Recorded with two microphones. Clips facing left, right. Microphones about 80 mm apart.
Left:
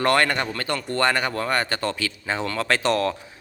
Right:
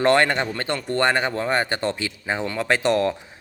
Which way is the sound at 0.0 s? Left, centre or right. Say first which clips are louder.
Right 2 dB; right.